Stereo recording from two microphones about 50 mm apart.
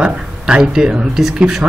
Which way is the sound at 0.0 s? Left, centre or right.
Centre.